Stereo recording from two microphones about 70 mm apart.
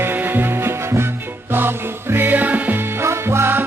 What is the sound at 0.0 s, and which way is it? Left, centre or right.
Music, right.